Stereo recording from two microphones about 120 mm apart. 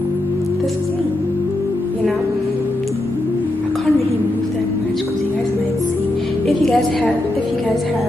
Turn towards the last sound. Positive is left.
turn(degrees=5)  # may be behind; listen again after turning